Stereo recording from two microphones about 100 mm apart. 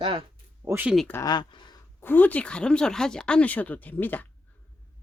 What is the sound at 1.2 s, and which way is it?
Speech, 45° left (ahead or behind).